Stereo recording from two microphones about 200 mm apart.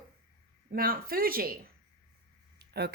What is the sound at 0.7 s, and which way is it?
Speech, 45° right (ahead or behind).